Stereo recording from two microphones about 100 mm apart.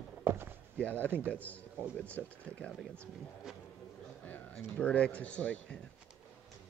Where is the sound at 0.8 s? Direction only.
15° left (ahead or behind).